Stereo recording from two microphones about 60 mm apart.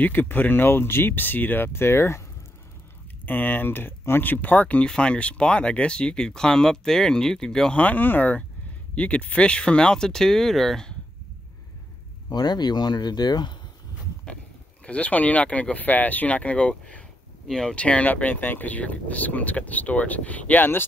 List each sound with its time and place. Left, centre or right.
0.0 s speech: left
3.3 s speech: left; by 7.7 s centre
7.7 s speech: left; by 11.0 s centre
13.2 s speech: left
14.9 s speech: left